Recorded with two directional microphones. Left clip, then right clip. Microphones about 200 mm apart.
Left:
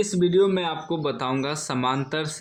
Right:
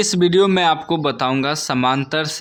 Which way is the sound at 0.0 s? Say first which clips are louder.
Right 5 dB; 35° right (ahead or behind).